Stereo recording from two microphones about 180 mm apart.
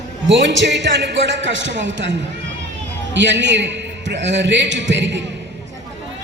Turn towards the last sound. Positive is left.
turn(degrees=-80)